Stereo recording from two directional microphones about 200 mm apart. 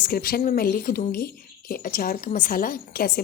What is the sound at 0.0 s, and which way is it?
Speech, 45° left (ahead or behind).